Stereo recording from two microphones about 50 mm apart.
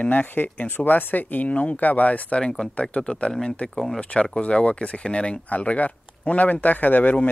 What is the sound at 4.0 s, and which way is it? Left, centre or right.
Speech, left.